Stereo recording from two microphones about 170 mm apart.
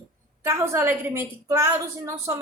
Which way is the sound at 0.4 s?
15° right (ahead or behind).